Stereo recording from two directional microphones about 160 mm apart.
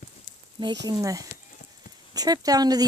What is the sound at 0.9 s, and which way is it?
Speech, 20° right (ahead or behind).